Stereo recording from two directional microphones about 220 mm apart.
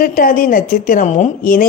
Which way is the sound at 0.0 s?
40° left (ahead or behind).